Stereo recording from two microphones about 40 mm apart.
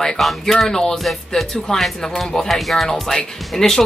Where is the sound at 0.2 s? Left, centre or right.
Centre.